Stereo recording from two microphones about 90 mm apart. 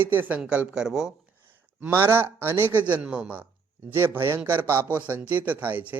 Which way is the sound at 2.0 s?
25° right (ahead or behind).